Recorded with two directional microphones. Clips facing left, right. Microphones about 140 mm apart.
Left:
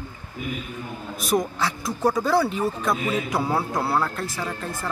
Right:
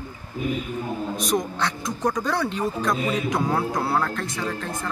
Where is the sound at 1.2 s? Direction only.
5° left (ahead or behind).